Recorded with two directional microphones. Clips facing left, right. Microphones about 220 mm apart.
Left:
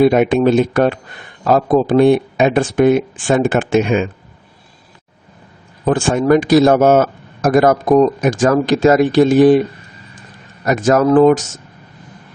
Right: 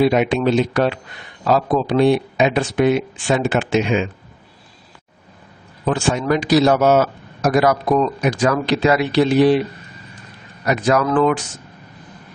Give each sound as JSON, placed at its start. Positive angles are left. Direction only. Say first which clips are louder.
{"t": 0.0, "sound": "speech", "louder": "left 5 dB", "side_deg": 50}
{"t": 5.8, "sound": "speech", "louder": "left 5 dB", "side_deg": 50}
{"t": 10.7, "sound": "speech", "louder": "left 5 dB", "side_deg": 45}